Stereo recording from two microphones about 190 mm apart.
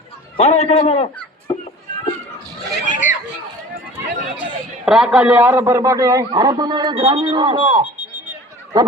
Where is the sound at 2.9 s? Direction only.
40° left (ahead or behind).